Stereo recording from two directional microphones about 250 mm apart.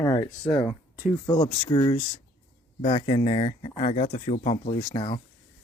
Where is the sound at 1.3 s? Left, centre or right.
Centre.